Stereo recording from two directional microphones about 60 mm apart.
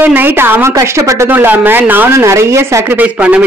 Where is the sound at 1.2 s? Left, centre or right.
Right.